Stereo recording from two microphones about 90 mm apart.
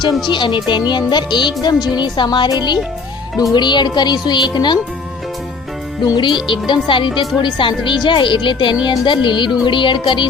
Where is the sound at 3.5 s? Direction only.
55° left (ahead or behind).